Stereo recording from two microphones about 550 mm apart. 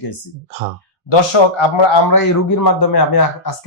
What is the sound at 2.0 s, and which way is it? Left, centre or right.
Speech, left.